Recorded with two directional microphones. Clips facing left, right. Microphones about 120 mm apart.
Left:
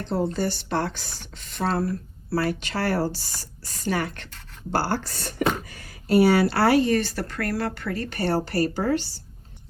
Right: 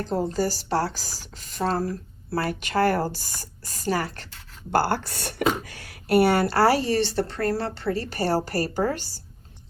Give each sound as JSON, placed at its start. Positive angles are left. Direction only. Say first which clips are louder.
{"t": 0.0, "sound": "a woman's voice", "louder": "even", "side_deg": -40}
{"t": 4.7, "sound": "speech", "louder": "right 2 dB", "side_deg": -55}
{"t": 5.6, "sound": "a woman's voice", "louder": "left 1 dB", "side_deg": -75}